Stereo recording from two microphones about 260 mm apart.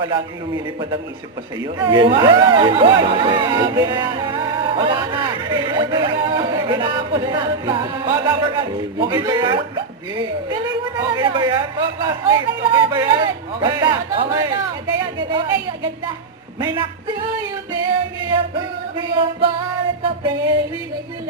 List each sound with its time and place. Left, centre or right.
0.0 s speech: centre
17.7 s music: centre